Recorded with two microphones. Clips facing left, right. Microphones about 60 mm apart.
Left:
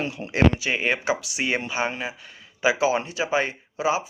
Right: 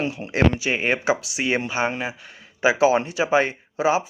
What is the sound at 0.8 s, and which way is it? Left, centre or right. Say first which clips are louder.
Speech: right 3 dB; right.